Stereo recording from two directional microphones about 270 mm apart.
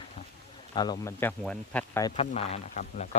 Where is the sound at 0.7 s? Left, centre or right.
Centre.